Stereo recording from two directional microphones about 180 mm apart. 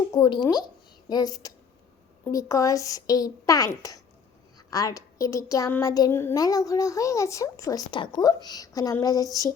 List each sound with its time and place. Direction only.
0.1 s a woman's voice: 25° left (ahead or behind)